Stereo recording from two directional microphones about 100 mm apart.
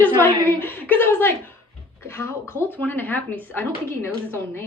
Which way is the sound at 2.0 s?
25° left (ahead or behind).